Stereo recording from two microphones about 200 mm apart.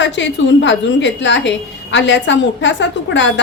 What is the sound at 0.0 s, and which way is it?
A woman's voice, 65° left (ahead or behind).